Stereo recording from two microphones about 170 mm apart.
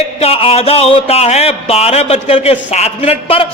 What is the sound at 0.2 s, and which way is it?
Speech, 35° left (ahead or behind).